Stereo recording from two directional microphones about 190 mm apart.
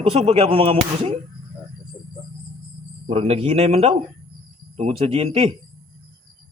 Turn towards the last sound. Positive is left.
turn(degrees=-30)  # may be behind; listen again after turning